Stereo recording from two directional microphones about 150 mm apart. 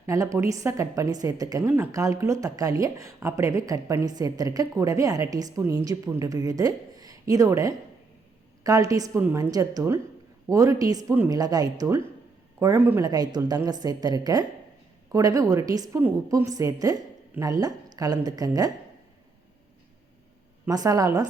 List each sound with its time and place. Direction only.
0.0 s speech: 20° right (ahead or behind)
16.0 s a woman's voice: 15° right (ahead or behind)
20.7 s speech: 25° right (ahead or behind)